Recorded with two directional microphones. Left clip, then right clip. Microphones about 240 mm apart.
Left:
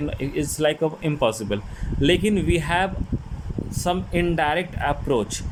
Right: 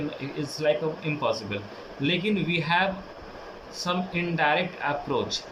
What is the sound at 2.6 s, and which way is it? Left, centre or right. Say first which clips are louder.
Speech: left 1 dB; left.